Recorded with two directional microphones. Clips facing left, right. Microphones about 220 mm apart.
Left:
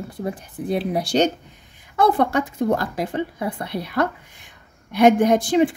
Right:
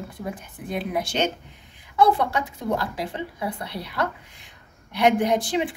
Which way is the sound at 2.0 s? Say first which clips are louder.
Left 2 dB; 50° left (ahead or behind).